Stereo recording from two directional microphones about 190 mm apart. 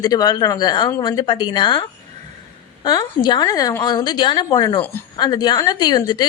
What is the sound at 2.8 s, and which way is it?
Speech, 20° left (ahead or behind).